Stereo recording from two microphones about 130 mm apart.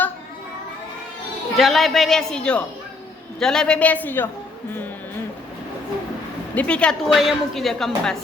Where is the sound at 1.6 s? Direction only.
Centre (ahead or behind).